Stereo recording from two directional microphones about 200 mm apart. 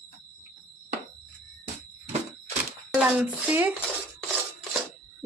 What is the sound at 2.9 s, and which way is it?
Speech, 5° right (ahead or behind).